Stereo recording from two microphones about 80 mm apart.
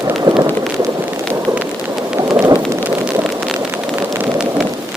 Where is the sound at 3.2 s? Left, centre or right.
Centre.